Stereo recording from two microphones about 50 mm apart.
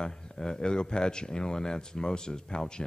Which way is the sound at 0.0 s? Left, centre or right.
Centre.